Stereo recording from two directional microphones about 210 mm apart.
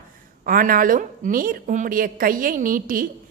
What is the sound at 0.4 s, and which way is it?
A woman's voice, 45° right (ahead or behind).